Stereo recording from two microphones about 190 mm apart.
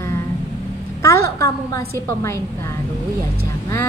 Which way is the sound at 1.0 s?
15° left (ahead or behind).